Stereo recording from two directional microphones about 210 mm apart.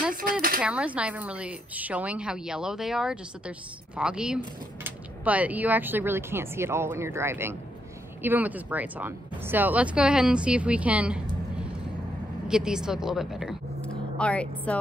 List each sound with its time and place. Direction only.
0.1 s speech: 45° right (ahead or behind)
0.6 s a woman's voice: 5° right (ahead or behind)